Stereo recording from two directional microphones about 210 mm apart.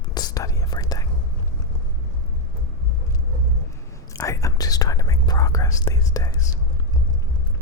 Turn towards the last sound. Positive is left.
turn(degrees=15)  # may be behind; listen again after turning